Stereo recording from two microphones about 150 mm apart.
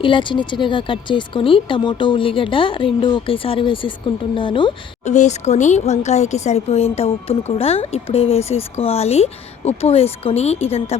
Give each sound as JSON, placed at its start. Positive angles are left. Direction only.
{"t": 0.0, "sound": "speech", "side_deg": 35}
{"t": 5.0, "sound": "speech", "side_deg": 50}